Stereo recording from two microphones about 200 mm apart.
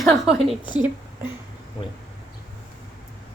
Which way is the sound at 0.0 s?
Centre (ahead or behind).